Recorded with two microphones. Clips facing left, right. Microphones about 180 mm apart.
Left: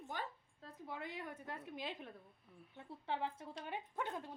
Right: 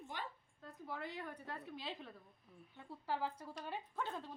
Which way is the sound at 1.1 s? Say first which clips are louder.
Even; 15° left (ahead or behind).